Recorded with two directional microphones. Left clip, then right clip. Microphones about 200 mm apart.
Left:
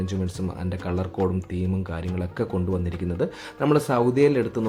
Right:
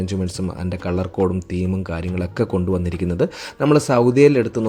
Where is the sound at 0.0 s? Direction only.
30° right (ahead or behind).